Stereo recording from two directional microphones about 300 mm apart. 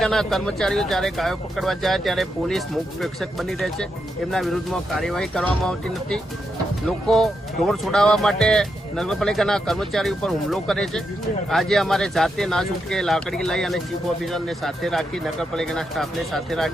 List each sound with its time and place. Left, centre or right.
0.0 s speech: centre